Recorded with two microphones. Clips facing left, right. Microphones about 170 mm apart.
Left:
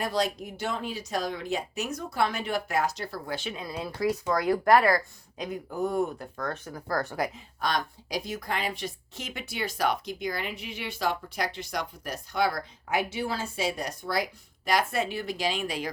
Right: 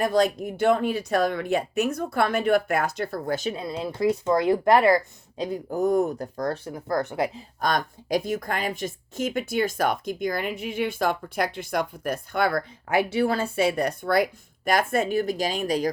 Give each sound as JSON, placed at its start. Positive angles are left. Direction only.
{"t": 0.0, "sound": "a woman's voice", "side_deg": -50}
{"t": 5.5, "sound": "speech", "side_deg": -45}
{"t": 7.6, "sound": "a woman's voice", "side_deg": -50}